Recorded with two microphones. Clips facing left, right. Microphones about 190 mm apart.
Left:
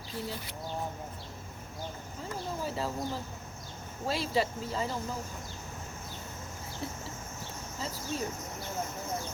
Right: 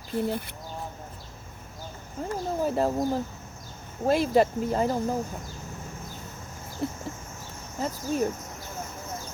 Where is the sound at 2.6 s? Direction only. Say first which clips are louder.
Right 11 dB; 50° right (ahead or behind).